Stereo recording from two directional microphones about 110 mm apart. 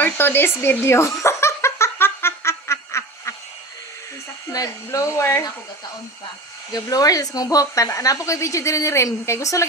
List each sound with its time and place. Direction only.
0.0 s giggle: 20° left (ahead or behind)
4.5 s speech: 30° left (ahead or behind)
6.7 s speech: 35° left (ahead or behind)